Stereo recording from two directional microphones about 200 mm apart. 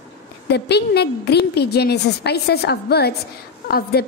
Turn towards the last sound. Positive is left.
turn(degrees=50)  # may be behind; listen again after turning